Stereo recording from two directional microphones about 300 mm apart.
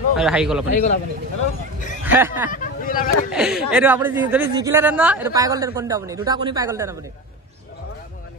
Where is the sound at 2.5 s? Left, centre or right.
Left.